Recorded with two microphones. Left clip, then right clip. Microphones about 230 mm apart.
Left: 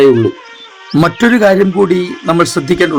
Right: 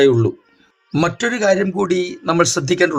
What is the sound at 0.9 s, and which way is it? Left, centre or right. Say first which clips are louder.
Speech: left 8 dB; left.